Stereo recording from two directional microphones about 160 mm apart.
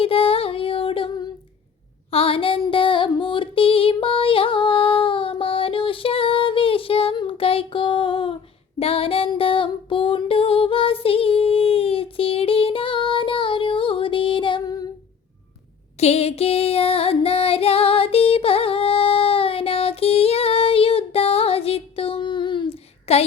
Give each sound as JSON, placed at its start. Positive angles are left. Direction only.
{"t": 0.0, "sound": "music", "side_deg": 35}
{"t": 2.0, "sound": "female singing", "side_deg": 35}
{"t": 8.8, "sound": "music", "side_deg": 35}
{"t": 16.0, "sound": "music", "side_deg": 40}